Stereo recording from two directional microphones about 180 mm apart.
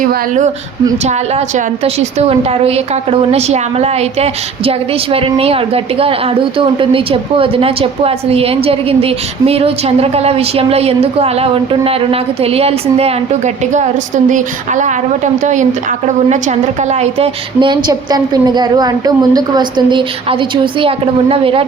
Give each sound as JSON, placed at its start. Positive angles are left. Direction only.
{"t": 0.1, "sound": "speech", "side_deg": -45}
{"t": 1.5, "sound": "a woman's voice", "side_deg": -35}